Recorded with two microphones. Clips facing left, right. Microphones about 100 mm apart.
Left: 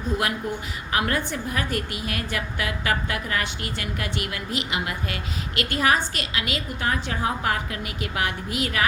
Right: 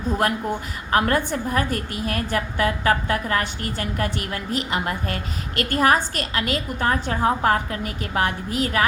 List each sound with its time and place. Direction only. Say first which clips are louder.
0.9 s a woman's voice: right 5 dB; 40° right (ahead or behind)